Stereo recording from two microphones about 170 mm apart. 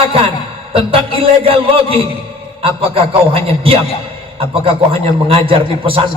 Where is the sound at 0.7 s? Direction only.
30° right (ahead or behind).